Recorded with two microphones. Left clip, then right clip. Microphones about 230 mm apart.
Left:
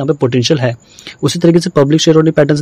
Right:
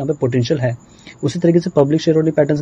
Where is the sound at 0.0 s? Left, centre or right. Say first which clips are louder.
Left 5 dB; left.